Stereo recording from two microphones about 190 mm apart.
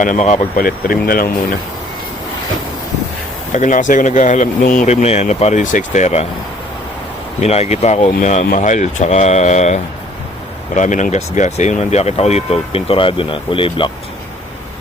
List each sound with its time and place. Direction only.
0.0 s speech: 40° left (ahead or behind)
3.5 s speech: 40° left (ahead or behind)
7.4 s speech: 35° left (ahead or behind)